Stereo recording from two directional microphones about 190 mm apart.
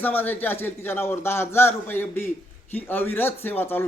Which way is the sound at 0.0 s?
10° left (ahead or behind).